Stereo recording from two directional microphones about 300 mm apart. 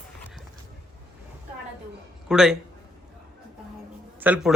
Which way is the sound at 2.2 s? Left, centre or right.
Centre.